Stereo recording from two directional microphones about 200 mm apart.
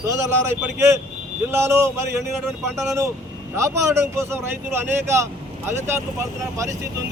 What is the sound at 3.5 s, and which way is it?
Speech, 15° right (ahead or behind).